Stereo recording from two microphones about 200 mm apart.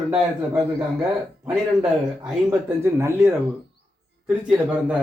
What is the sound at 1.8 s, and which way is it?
Speech, 10° right (ahead or behind).